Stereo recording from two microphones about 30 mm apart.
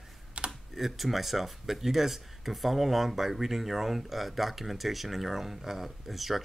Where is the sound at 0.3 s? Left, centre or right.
Right.